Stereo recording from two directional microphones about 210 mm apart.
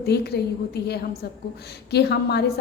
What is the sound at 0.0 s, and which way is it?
A woman's voice, 50° left (ahead or behind).